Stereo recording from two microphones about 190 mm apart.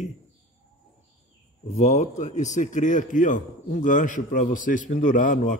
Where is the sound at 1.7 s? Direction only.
35° left (ahead or behind).